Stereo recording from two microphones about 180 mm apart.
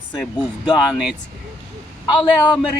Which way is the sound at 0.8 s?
Centre (ahead or behind).